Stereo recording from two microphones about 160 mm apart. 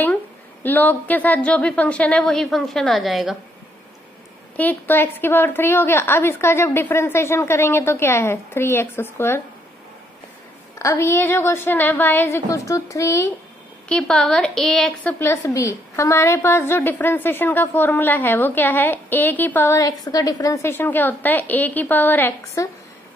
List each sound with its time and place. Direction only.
0.7 s a woman's voice: 10° left (ahead or behind)
4.6 s a woman's voice: 10° left (ahead or behind)
10.8 s a woman's voice: 15° left (ahead or behind)
13.8 s a woman's voice: 5° left (ahead or behind)
15.1 s a woman's voice: 15° left (ahead or behind)